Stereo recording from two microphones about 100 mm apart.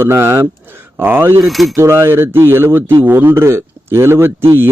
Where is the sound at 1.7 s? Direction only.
25° right (ahead or behind).